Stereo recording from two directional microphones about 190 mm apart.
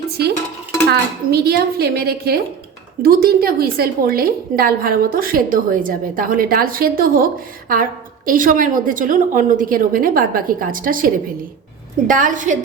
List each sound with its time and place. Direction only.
0.9 s a woman's voice: 55° right (ahead or behind)